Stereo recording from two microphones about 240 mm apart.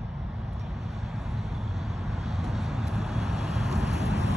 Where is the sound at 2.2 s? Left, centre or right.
Centre.